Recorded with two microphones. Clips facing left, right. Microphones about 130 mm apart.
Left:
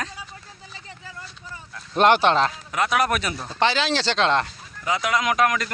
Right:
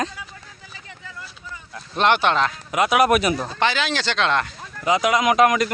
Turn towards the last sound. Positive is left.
turn(degrees=-15)  # may be behind; listen again after turning